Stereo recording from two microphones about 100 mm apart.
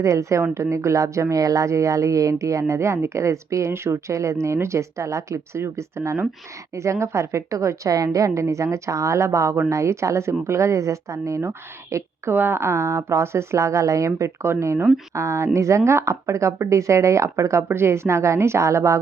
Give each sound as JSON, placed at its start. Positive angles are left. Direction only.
{"t": 0.0, "sound": "a woman's voice", "side_deg": -30}